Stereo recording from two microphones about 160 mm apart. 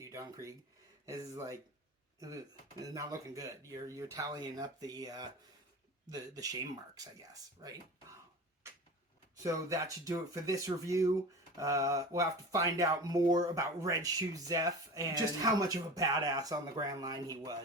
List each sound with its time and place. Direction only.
0.0 s a sound: 20° right (ahead or behind)
1.0 s speech: 20° right (ahead or behind)
2.8 s speech: 20° right (ahead or behind)
9.4 s speech: 20° right (ahead or behind)